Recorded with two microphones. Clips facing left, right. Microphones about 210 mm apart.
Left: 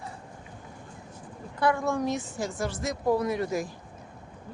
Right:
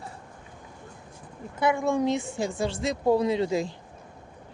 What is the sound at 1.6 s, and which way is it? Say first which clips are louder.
Speech: right 2 dB; 20° right (ahead or behind).